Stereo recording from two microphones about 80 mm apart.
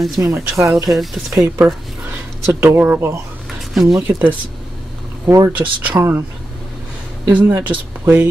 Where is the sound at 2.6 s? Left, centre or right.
Right.